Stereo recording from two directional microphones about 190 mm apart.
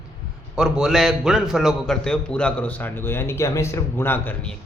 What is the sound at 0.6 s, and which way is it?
A man's voice, centre (ahead or behind).